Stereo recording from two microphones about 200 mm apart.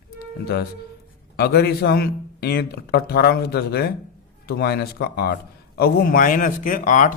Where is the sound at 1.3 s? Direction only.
55° left (ahead or behind).